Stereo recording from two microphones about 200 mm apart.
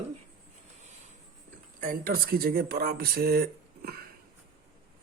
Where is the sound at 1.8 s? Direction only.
45° right (ahead or behind).